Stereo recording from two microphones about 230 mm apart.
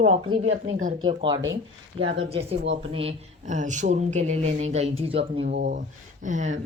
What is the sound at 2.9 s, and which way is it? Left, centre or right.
Speech, right.